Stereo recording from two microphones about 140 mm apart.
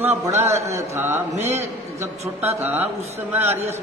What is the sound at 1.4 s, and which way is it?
Speech, 50° right (ahead or behind).